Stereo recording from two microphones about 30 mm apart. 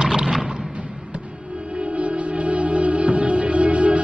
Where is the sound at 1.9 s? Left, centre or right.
Right.